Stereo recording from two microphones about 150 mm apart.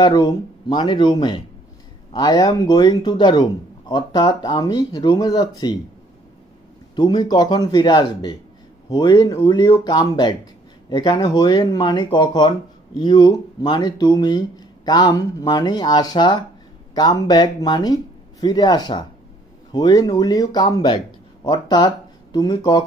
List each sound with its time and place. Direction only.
0.0 s speech: 30° left (ahead or behind)
7.0 s speech: 30° left (ahead or behind)